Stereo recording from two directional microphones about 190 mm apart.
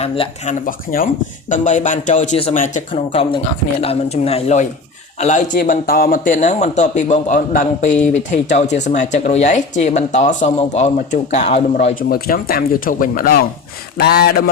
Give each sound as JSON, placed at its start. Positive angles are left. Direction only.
{"t": 0.0, "sound": "speech", "side_deg": 35}
{"t": 2.9, "sound": "speech", "side_deg": 30}
{"t": 12.0, "sound": "speech", "side_deg": 50}